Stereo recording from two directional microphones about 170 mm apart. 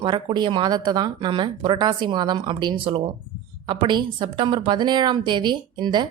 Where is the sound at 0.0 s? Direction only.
30° right (ahead or behind).